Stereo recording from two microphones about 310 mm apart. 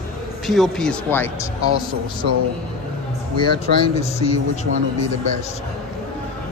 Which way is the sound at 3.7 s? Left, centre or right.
Right.